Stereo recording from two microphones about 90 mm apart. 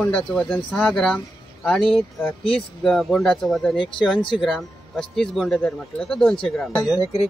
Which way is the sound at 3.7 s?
65° left (ahead or behind).